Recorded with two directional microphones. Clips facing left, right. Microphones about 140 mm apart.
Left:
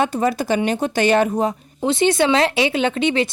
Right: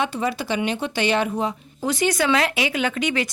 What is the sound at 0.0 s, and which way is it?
Speech, 45° left (ahead or behind).